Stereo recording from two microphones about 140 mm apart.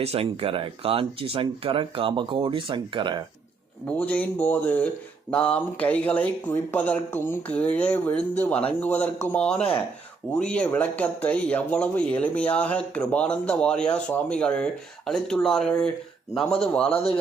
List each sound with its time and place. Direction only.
0.0 s speech: 45° right (ahead or behind)
3.9 s a man's voice: 10° left (ahead or behind)
16.9 s a man's voice: 45° left (ahead or behind)